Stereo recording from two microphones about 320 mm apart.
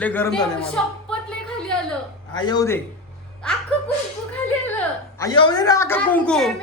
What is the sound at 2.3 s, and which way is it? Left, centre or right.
Speech, centre.